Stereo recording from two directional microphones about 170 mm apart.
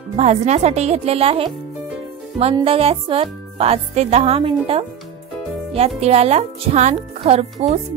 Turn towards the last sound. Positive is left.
turn(degrees=-35)  # may be behind; listen again after turning